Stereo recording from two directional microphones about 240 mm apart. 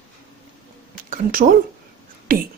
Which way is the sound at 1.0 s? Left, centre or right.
Right.